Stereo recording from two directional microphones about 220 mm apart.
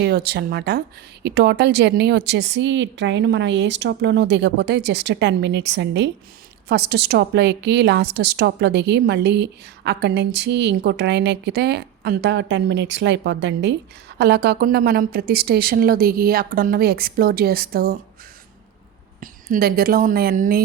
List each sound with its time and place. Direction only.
0.0 s a woman's voice: 45° right (ahead or behind)
19.2 s a woman's voice: 40° right (ahead or behind)